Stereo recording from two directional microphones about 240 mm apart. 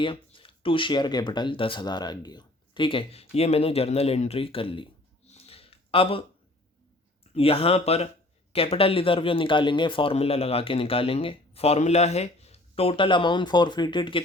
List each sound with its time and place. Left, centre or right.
0.0 s speech: left
5.3 s a sound: left
7.3 s speech: left